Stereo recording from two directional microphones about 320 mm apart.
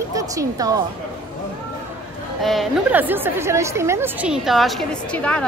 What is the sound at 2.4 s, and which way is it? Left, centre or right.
A woman's voice, centre.